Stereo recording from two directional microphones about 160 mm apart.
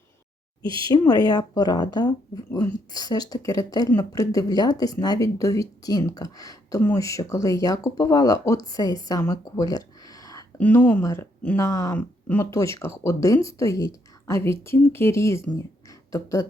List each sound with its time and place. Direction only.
0.6 s speech: 30° right (ahead or behind)
0.9 s speech: 25° left (ahead or behind)
10.6 s speech: 10° left (ahead or behind)